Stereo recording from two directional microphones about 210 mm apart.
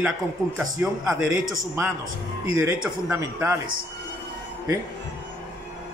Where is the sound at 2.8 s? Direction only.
10° right (ahead or behind).